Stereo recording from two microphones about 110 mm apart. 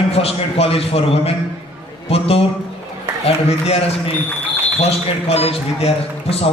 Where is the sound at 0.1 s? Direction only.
65° left (ahead or behind).